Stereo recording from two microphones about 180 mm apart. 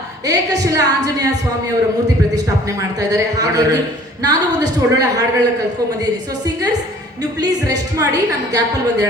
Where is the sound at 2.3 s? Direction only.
20° right (ahead or behind).